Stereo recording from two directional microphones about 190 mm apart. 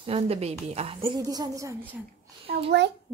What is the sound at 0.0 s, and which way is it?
A woman's voice, 30° right (ahead or behind).